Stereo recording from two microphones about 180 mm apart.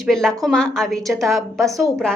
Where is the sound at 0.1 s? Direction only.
Centre (ahead or behind).